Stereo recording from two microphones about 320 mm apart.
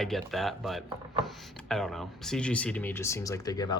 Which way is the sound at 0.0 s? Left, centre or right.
Centre.